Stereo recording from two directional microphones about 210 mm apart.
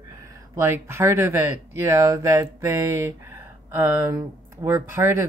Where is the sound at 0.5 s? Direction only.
10° right (ahead or behind).